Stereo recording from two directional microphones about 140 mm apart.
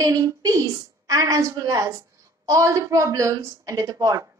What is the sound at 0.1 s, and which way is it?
A woman's voice, 25° right (ahead or behind).